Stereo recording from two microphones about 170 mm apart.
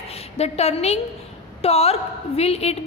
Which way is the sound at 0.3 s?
40° left (ahead or behind).